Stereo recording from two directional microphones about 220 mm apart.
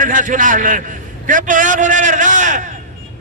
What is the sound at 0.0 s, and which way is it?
A man's voice, 35° right (ahead or behind).